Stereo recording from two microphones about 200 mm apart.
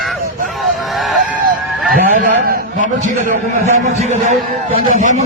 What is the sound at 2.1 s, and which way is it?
A man's voice, 40° right (ahead or behind).